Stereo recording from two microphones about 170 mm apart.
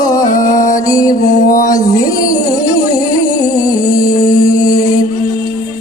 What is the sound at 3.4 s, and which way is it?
Music, 20° left (ahead or behind).